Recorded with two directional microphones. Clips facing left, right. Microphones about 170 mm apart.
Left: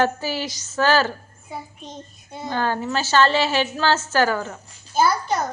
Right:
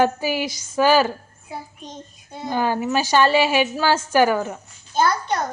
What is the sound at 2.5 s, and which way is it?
A woman's voice, 10° right (ahead or behind).